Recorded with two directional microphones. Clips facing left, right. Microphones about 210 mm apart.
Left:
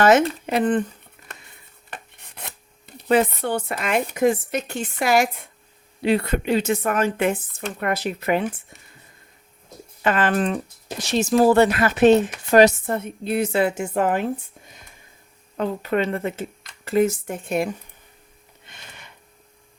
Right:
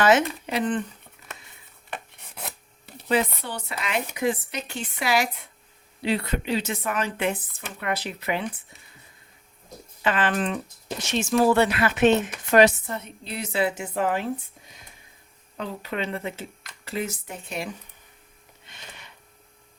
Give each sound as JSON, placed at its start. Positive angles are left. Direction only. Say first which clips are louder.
{"t": 0.0, "sound": "speech", "louder": "left 4 dB", "side_deg": 50}
{"t": 2.3, "sound": "filing", "louder": "right 2 dB", "side_deg": -5}
{"t": 3.1, "sound": "speech", "louder": "left 6 dB", "side_deg": 55}
{"t": 10.0, "sound": "speech", "louder": "left 4 dB", "side_deg": 45}
{"t": 15.5, "sound": "speech", "louder": "left 8 dB", "side_deg": 50}
{"t": 18.6, "sound": "a sound", "louder": "left 1 dB", "side_deg": 50}